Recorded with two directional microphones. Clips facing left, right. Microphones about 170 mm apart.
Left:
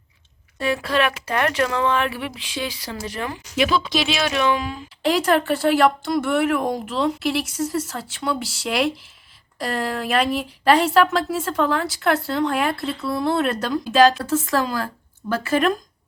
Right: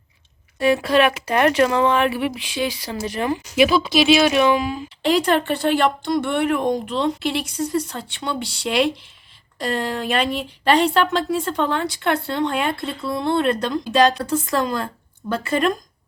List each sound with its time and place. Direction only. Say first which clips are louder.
0.6 s speech: right 5 dB; 15° right (ahead or behind)
5.0 s speech: even; centre (ahead or behind)